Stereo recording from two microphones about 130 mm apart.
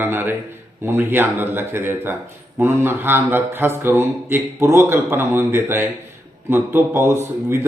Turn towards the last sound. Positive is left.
turn(degrees=-20)  # may be behind; listen again after turning